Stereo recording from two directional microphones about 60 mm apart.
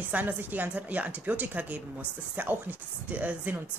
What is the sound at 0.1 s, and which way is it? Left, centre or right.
Speech, right.